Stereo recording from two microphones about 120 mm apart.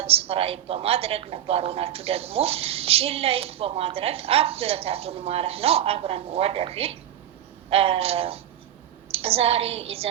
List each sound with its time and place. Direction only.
0.0 s a woman's voice: 55° right (ahead or behind)